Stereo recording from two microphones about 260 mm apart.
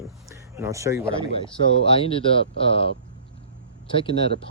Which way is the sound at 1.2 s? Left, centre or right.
Left.